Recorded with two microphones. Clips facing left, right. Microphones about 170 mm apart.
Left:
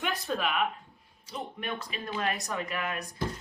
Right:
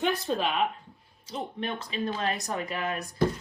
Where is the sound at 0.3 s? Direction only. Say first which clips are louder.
Right 2 dB; 30° right (ahead or behind).